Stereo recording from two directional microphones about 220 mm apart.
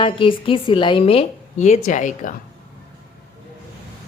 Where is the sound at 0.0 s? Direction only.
25° left (ahead or behind).